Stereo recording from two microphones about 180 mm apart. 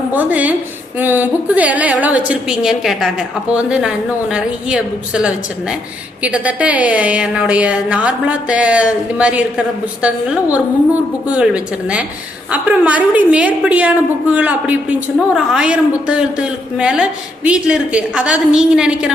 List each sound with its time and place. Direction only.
0.1 s a woman's voice: 10° right (ahead or behind)